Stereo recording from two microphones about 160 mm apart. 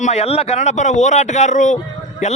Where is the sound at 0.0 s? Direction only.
40° left (ahead or behind).